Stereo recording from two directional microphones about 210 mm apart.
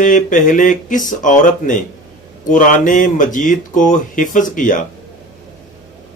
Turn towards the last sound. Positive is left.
turn(degrees=40)  # may be behind; listen again after turning